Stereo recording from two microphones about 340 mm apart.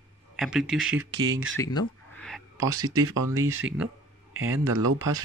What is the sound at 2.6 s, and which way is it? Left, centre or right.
Speech, centre.